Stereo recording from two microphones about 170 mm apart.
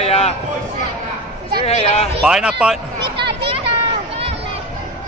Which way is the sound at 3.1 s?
30° right (ahead or behind).